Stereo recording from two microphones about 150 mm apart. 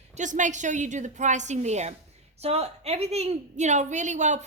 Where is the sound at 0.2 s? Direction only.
55° right (ahead or behind).